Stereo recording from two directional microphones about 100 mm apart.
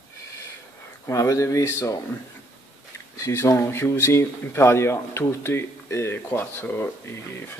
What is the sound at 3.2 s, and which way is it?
Speech, 25° left (ahead or behind).